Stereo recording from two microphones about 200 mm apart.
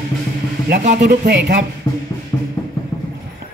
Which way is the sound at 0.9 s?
60° right (ahead or behind).